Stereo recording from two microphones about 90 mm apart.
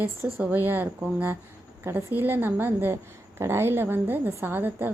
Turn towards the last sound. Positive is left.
turn(degrees=-20)  # may be behind; listen again after turning